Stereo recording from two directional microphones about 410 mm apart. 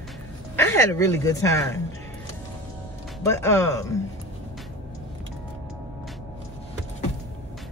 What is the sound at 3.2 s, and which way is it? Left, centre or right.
Speech, centre.